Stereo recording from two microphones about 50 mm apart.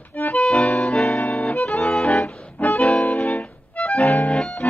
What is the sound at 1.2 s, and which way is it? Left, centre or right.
Accordion, left.